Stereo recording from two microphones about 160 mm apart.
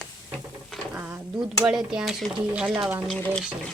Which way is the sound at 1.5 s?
Centre (ahead or behind).